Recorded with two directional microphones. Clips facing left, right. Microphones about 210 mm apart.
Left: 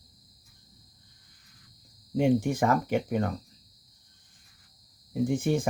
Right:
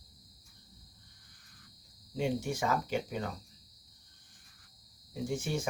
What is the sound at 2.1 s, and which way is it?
Speech, 55° left (ahead or behind).